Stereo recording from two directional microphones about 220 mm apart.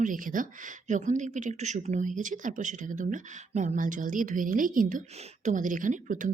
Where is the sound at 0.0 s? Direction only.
35° right (ahead or behind).